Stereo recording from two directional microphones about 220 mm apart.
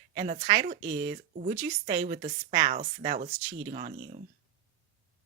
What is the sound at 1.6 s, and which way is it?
Speech, 20° right (ahead or behind).